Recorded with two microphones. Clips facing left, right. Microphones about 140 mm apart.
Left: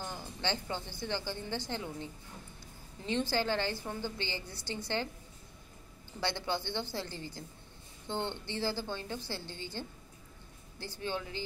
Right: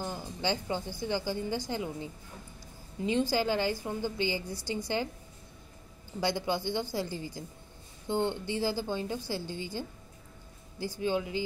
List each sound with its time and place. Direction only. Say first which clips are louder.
0.0 s a sound: right 4 dB; 10° right (ahead or behind)
1.0 s a woman's voice: right 6 dB; 10° right (ahead or behind)
6.2 s a woman's voice: right 5 dB; 15° right (ahead or behind)
11.0 s a woman's voice: right 7 dB; 15° right (ahead or behind)